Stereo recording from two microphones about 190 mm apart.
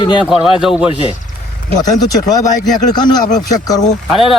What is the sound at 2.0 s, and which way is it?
Speech, 20° left (ahead or behind).